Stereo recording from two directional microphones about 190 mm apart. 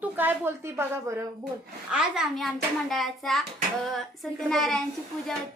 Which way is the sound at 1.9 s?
5° right (ahead or behind).